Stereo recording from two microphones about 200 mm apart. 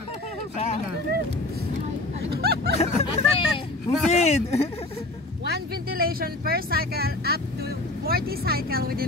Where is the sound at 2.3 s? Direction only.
50° right (ahead or behind).